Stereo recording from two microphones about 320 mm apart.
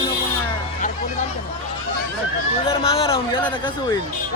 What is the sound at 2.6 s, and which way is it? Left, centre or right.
Speech, centre.